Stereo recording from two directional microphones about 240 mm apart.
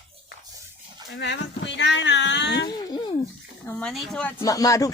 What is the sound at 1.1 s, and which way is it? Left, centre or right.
Speech, left.